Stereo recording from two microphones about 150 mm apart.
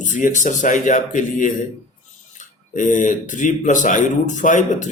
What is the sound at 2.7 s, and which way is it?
Speech, 60° left (ahead or behind).